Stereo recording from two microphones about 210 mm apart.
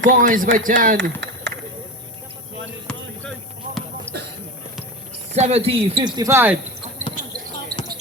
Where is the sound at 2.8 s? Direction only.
5° left (ahead or behind).